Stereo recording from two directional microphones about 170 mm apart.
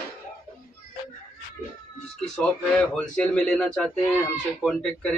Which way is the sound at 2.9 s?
5° left (ahead or behind).